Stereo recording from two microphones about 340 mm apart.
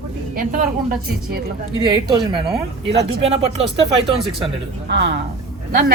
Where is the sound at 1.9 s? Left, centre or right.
Centre.